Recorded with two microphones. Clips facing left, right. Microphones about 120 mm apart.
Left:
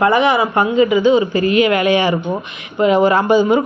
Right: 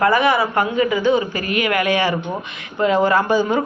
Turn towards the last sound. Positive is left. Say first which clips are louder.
# left 4 dB
turn(degrees=15)  # may be behind; listen again after turning